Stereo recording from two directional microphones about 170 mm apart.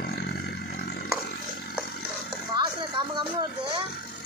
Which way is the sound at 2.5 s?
25° right (ahead or behind).